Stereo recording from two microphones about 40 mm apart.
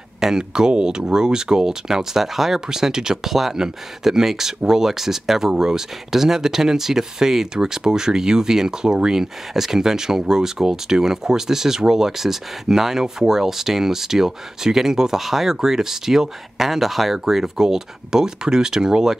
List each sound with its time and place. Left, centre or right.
0.2 s speech: centre